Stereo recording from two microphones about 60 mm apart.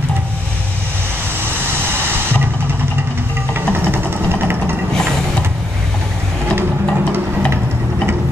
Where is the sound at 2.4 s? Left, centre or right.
Right.